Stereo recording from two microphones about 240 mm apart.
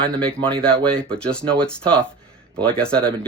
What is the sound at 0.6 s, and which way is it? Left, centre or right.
Speech, centre.